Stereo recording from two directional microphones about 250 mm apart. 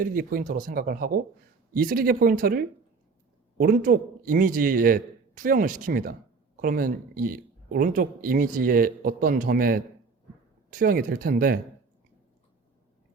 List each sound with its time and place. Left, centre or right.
0.0 s speech: right